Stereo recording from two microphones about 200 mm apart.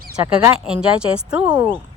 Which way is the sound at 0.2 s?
5° right (ahead or behind).